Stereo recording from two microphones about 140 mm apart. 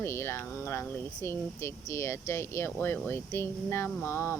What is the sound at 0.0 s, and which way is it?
Speech, 20° left (ahead or behind).